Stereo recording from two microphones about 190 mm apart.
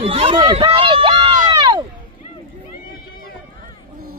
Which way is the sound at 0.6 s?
30° right (ahead or behind).